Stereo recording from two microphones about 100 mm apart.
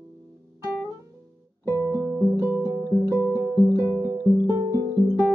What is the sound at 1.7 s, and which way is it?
Music, 35° right (ahead or behind).